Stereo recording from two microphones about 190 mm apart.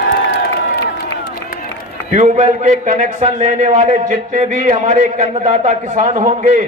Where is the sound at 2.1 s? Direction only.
40° right (ahead or behind).